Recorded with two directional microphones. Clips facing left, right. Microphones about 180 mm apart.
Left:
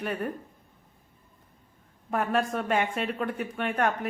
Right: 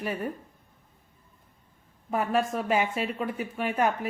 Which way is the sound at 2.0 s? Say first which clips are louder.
Right 1 dB; centre (ahead or behind).